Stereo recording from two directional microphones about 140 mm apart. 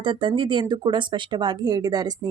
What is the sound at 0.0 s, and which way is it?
Speech, 35° right (ahead or behind).